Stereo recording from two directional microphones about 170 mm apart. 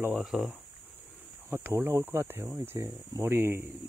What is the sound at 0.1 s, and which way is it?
Speech, centre (ahead or behind).